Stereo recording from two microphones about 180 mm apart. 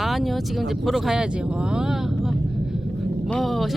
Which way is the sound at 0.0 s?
Centre (ahead or behind).